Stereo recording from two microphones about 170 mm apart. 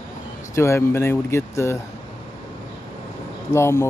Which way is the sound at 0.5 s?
15° left (ahead or behind).